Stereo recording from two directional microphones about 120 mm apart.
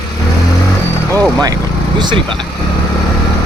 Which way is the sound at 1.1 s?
20° left (ahead or behind).